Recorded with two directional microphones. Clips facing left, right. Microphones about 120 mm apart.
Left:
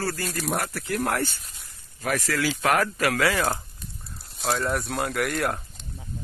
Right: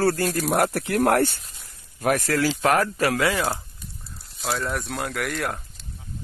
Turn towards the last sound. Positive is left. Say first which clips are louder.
# left 2 dB
turn(degrees=0)  # may be behind; listen again after turning